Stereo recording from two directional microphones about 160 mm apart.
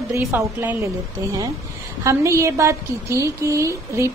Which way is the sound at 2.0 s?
20° right (ahead or behind).